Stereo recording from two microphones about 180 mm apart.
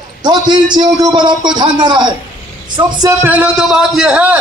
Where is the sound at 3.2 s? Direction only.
10° right (ahead or behind).